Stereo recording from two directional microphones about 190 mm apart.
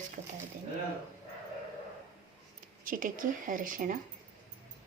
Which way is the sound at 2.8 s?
45° right (ahead or behind).